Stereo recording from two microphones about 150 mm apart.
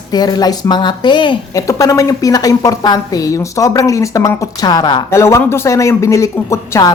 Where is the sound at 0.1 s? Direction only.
25° left (ahead or behind).